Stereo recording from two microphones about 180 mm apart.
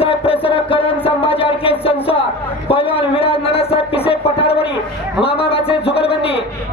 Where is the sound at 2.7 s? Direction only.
30° left (ahead or behind).